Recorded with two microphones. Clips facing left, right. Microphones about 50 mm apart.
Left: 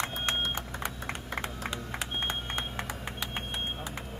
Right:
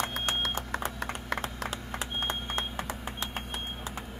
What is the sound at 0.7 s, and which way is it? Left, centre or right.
Typing, right.